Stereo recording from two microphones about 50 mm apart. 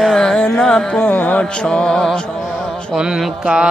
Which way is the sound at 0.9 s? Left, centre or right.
Left.